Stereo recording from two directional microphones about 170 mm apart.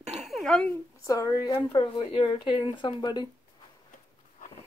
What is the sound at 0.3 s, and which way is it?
Speech, 5° left (ahead or behind).